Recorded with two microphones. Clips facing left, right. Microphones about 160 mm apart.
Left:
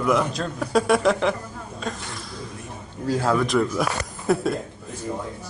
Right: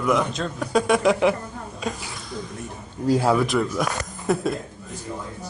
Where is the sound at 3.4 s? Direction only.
Centre (ahead or behind).